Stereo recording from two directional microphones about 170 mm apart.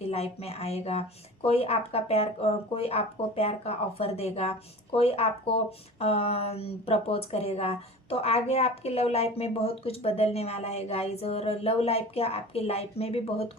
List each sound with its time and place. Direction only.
0.1 s speech: 40° left (ahead or behind)